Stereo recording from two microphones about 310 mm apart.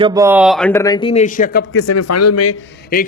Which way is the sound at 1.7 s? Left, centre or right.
Left.